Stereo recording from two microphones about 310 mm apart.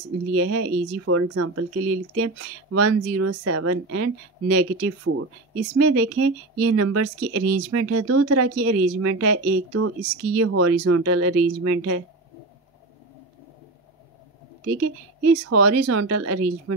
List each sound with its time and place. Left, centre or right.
0.3 s speech: right
14.8 s speech: right